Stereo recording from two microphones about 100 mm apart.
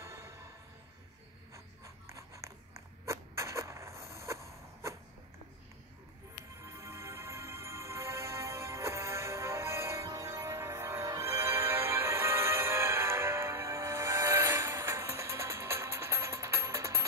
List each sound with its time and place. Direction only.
0.0 s music: 30° right (ahead or behind)
2.0 s a sound: 30° right (ahead or behind)
6.6 s music: 30° right (ahead or behind)